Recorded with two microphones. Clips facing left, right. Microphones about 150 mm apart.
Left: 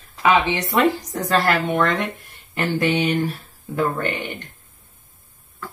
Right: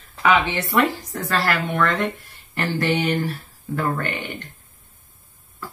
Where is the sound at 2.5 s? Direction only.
15° left (ahead or behind).